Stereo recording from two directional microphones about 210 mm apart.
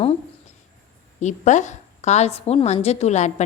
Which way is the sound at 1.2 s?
35° left (ahead or behind).